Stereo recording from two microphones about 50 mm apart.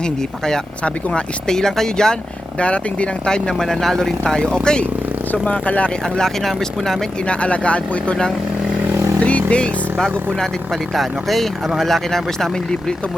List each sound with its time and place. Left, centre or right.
0.0 s speech: centre
2.6 s speech: left
5.3 s speech: left
6.1 s speech: centre
7.3 s speech: left
10.3 s speech: centre